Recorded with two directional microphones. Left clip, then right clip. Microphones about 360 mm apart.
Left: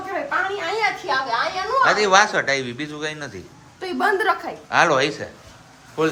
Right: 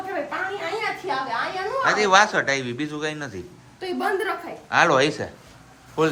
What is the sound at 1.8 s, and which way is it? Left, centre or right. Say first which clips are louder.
A man's voice: left 1 dB; centre.